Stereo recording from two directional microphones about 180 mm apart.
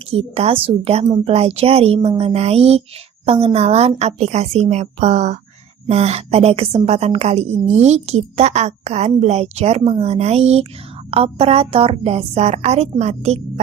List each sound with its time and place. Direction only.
0.1 s a woman's voice: 35° right (ahead or behind)